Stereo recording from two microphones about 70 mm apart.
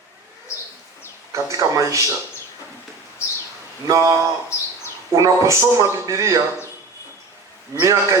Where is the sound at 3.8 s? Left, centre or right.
Right.